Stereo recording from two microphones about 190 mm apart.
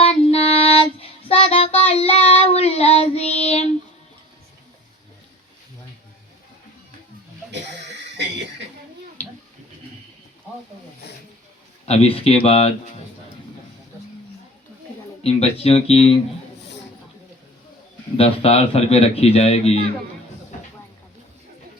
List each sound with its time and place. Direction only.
0.0 s child singing: 30° left (ahead or behind)
11.9 s a man's voice: 30° left (ahead or behind)
15.2 s a man's voice: 35° left (ahead or behind)
18.2 s a man's voice: 30° left (ahead or behind)